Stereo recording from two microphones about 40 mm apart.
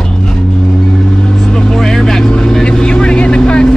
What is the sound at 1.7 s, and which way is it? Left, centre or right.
Vehicle, centre.